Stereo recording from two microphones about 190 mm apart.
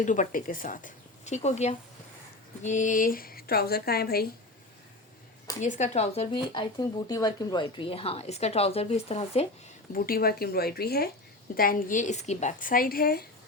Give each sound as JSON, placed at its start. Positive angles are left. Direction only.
{"t": 0.0, "sound": "a woman's voice", "side_deg": 40}
{"t": 5.5, "sound": "speech", "side_deg": 40}
{"t": 9.9, "sound": "a woman's voice", "side_deg": 50}